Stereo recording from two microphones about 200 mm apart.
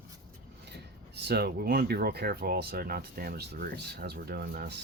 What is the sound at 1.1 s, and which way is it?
Speech, 55° right (ahead or behind).